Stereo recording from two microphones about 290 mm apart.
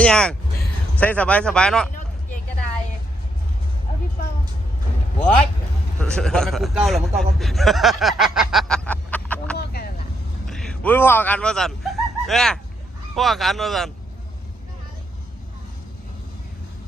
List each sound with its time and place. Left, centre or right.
0.0 s speech: centre
6.0 s a man's voice: centre
9.6 s vehicle: left
10.4 s a man's voice: centre